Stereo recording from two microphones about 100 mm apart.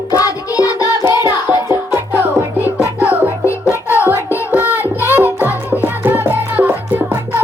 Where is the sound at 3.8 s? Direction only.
25° left (ahead or behind).